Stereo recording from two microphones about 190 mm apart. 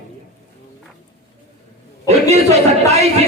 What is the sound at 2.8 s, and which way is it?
Speech, 35° right (ahead or behind).